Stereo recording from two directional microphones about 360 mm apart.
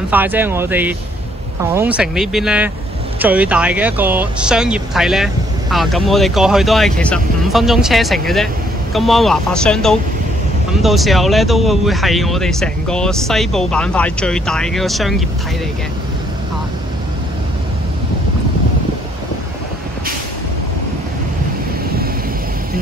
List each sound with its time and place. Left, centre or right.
0.1 s speech: centre